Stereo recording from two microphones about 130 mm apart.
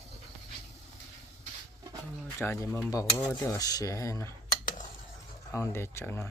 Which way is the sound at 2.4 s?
20° left (ahead or behind).